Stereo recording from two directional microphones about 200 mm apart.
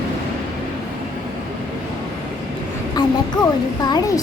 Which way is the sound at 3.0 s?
20° left (ahead or behind).